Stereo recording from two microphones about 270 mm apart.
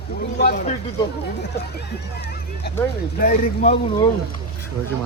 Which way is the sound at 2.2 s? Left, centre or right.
Left.